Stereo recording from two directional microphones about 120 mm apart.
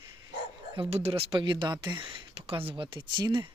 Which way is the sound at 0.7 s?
45° right (ahead or behind).